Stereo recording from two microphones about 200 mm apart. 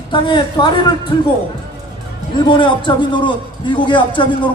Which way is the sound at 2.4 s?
25° left (ahead or behind).